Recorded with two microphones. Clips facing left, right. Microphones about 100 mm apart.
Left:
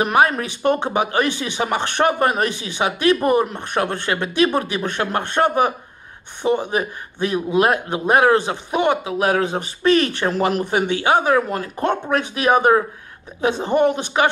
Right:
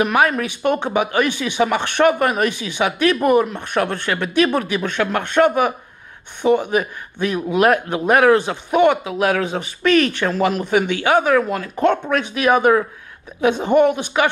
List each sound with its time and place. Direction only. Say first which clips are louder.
0.0 s speech: even; 30° left (ahead or behind)